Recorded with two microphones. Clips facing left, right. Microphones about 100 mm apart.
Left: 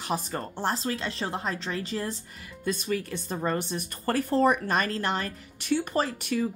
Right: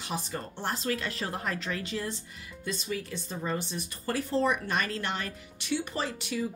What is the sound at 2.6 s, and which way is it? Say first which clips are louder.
Speech: left 5 dB; 50° left (ahead or behind).